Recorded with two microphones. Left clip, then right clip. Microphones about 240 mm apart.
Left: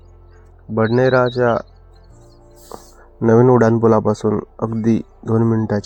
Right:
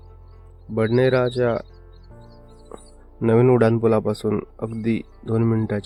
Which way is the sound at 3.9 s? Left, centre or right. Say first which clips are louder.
Left 5 dB; centre.